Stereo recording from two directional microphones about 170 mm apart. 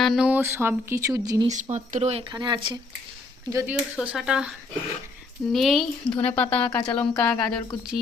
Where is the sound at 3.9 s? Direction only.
5° right (ahead or behind).